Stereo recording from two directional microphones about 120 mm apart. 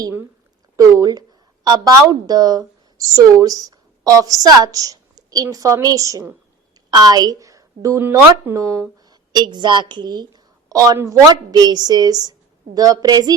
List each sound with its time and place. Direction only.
0.8 s a woman's voice: 25° right (ahead or behind)
9.0 s a woman's voice: 35° right (ahead or behind)